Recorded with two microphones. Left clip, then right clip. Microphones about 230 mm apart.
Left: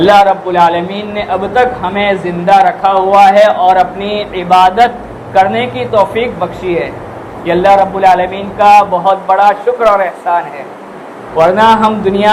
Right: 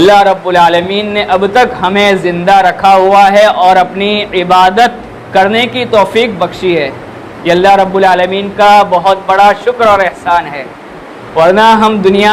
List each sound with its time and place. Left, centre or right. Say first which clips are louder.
0.0 s a man's voice: right 1 dB; right